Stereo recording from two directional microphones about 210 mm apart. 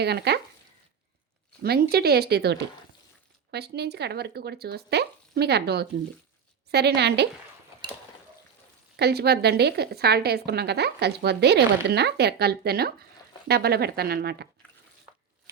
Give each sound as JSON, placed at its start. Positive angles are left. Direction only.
{"t": 0.0, "sound": "a woman's voice", "side_deg": -50}
{"t": 1.6, "sound": "a woman's voice", "side_deg": -50}
{"t": 9.0, "sound": "a woman's voice", "side_deg": -50}